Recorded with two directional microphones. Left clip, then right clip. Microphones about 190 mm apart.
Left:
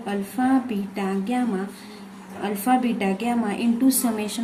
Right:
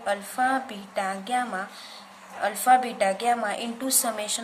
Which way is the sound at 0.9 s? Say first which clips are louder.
Right 1 dB; 20° right (ahead or behind).